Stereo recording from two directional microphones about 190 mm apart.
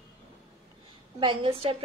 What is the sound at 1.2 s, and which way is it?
Speech, 30° right (ahead or behind).